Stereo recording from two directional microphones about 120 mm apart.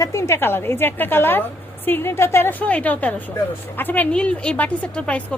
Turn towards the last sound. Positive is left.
turn(degrees=10)  # may be behind; listen again after turning